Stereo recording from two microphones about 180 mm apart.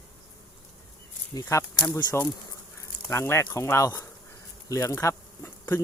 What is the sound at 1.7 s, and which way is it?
Speech, 10° left (ahead or behind).